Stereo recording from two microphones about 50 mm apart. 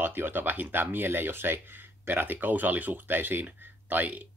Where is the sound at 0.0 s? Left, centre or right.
Right.